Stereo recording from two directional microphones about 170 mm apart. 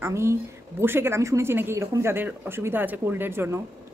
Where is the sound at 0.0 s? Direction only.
15° right (ahead or behind).